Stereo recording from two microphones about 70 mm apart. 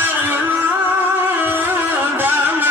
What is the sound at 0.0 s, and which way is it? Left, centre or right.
Music, right.